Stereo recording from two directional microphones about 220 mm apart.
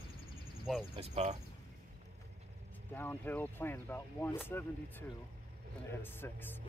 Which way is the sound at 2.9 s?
10° left (ahead or behind).